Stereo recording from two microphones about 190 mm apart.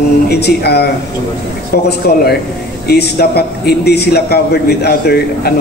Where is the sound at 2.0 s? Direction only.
55° left (ahead or behind).